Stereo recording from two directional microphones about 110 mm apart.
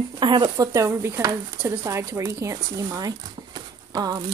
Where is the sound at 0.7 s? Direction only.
25° right (ahead or behind).